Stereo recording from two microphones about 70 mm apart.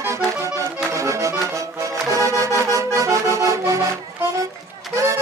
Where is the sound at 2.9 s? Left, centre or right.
Right.